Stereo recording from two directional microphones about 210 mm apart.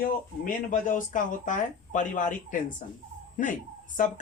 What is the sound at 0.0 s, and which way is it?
Speech, 40° left (ahead or behind).